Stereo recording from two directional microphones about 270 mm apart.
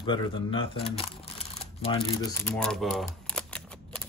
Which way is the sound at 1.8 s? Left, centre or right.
Left.